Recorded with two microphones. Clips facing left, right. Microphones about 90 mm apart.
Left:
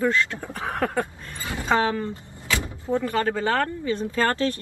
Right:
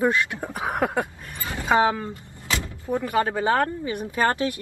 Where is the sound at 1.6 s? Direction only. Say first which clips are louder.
Right 2 dB; 15° right (ahead or behind).